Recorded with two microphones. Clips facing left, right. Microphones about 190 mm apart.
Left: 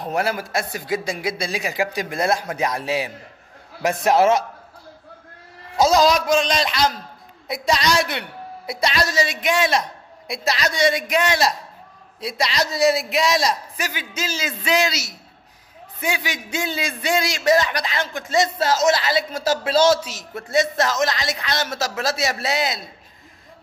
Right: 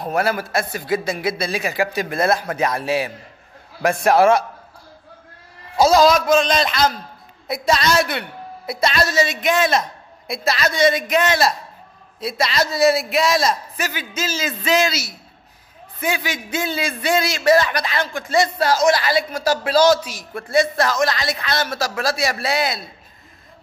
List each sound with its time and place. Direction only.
0.1 s a man's voice: 15° left (ahead or behind)
4.1 s a man's voice: 20° left (ahead or behind)
5.8 s a man's voice: 15° left (ahead or behind)
6.5 s a man's voice: 55° right (ahead or behind)
7.4 s a man's voice: 15° left (ahead or behind)